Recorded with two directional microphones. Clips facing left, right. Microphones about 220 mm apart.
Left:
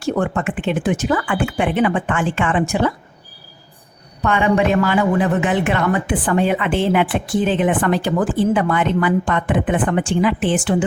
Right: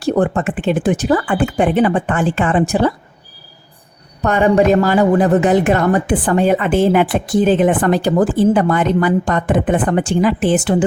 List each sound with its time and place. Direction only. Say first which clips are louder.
0.0 s a woman's voice: right 4 dB; 35° right (ahead or behind)
4.2 s a woman's voice: right 4 dB; 40° right (ahead or behind)